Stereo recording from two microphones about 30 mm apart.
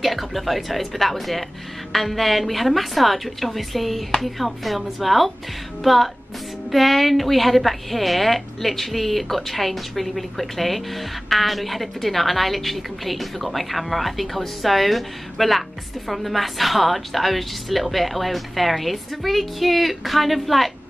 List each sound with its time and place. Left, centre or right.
0.0 s a woman's voice: centre